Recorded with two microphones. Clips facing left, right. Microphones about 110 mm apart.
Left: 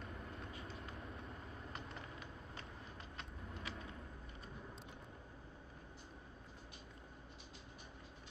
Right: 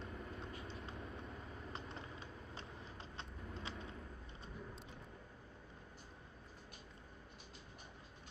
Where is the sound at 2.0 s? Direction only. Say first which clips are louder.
Right 1 dB; 30° right (ahead or behind).